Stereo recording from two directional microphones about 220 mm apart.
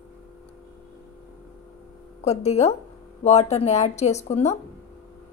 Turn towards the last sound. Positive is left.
turn(degrees=30)  # may be behind; listen again after turning